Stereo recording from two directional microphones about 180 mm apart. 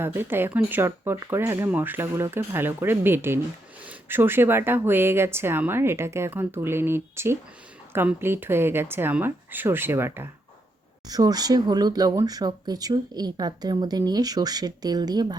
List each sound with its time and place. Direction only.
0.0 s speech: 10° right (ahead or behind)